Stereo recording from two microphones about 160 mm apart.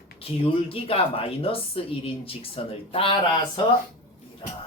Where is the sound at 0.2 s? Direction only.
35° left (ahead or behind).